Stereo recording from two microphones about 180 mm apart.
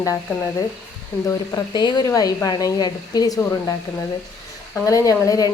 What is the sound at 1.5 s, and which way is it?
A woman's voice, 25° left (ahead or behind).